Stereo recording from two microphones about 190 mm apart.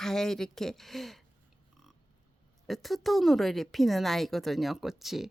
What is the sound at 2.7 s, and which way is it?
Speech, centre (ahead or behind).